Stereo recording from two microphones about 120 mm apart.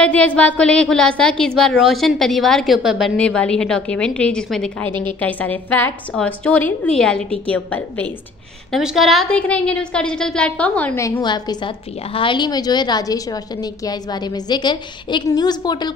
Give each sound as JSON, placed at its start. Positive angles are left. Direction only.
{"t": 0.0, "sound": "a woman's voice", "side_deg": 10}
{"t": 3.2, "sound": "a woman's voice", "side_deg": 10}
{"t": 8.7, "sound": "a woman's voice", "side_deg": 0}
{"t": 11.0, "sound": "a woman's voice", "side_deg": 25}
{"t": 11.2, "sound": "a woman's voice", "side_deg": 35}